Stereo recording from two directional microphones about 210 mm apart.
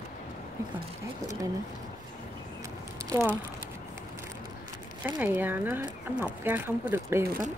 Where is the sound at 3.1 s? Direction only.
10° right (ahead or behind).